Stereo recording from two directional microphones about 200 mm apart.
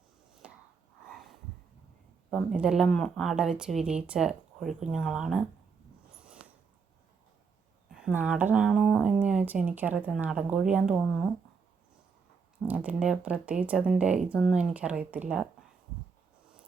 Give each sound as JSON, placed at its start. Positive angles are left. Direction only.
{"t": 0.4, "sound": "a sound", "side_deg": -5}
{"t": 2.3, "sound": "speech", "side_deg": 0}
{"t": 7.9, "sound": "speech", "side_deg": -5}
{"t": 12.6, "sound": "speech", "side_deg": -10}